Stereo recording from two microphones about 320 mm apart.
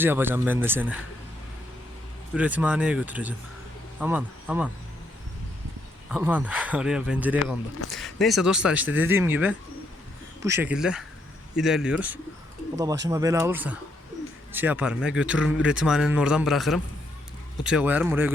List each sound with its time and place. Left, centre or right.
0.0 s speech: centre
2.3 s speech: centre
6.1 s speech: centre